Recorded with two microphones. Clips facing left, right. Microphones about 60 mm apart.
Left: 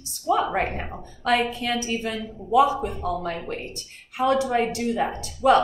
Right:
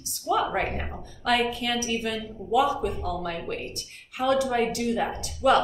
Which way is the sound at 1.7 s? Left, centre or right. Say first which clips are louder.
Left 1 dB; left.